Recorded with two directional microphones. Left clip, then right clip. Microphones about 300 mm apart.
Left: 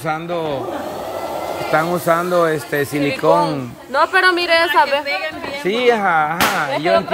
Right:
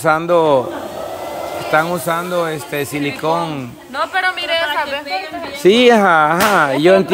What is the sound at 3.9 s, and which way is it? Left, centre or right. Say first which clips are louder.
Speech: left 4 dB; centre.